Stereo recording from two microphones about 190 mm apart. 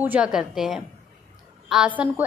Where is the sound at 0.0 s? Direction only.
5° right (ahead or behind).